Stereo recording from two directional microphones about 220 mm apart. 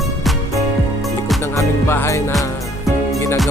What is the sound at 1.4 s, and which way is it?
Music, 10° left (ahead or behind).